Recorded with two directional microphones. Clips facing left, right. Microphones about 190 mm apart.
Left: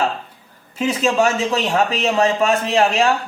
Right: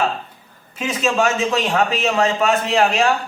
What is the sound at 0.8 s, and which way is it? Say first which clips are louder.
Speech: left 2 dB; 30° left (ahead or behind).